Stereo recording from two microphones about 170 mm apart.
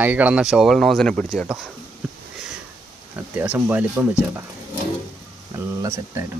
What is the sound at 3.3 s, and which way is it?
Speech, 10° right (ahead or behind).